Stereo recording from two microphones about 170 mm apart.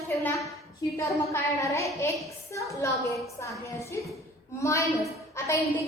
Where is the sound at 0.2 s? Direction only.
15° left (ahead or behind).